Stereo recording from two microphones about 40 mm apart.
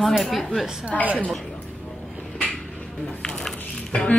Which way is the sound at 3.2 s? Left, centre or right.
Centre.